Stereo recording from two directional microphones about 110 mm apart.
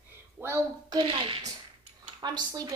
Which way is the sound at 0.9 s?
45° right (ahead or behind).